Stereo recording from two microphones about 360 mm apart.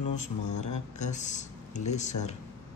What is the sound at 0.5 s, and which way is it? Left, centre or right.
Speech, left.